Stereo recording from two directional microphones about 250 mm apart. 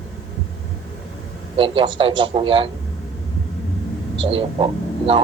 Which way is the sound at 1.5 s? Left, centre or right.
Right.